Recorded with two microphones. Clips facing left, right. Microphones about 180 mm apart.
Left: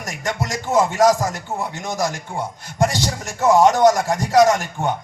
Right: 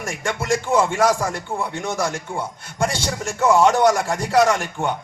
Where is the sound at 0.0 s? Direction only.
40° left (ahead or behind).